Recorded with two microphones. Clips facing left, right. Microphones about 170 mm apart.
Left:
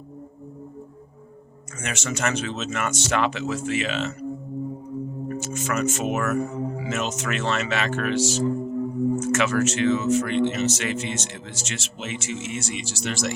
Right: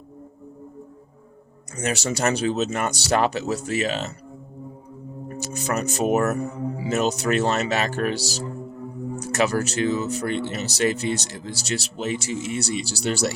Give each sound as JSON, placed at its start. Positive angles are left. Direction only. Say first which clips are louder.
{"t": 1.8, "sound": "speech", "louder": "right 4 dB", "side_deg": -35}
{"t": 5.3, "sound": "speech", "louder": "right 2 dB", "side_deg": -35}